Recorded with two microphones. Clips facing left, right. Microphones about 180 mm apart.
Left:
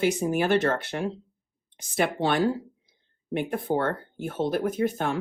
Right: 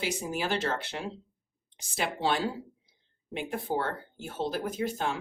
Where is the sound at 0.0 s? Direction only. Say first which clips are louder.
Left 8 dB; 55° left (ahead or behind).